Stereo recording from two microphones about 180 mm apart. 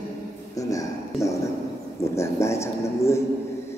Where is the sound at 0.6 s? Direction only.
20° left (ahead or behind).